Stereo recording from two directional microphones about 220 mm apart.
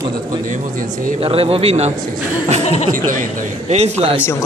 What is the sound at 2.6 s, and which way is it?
Speech, 30° left (ahead or behind).